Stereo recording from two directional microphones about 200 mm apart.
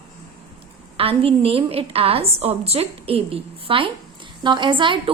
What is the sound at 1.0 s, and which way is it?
A woman's voice, 30° right (ahead or behind).